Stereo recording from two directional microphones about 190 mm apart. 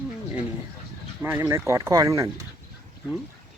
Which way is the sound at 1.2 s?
15° right (ahead or behind).